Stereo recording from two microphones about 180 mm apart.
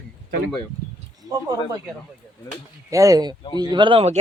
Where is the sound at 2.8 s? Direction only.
20° right (ahead or behind).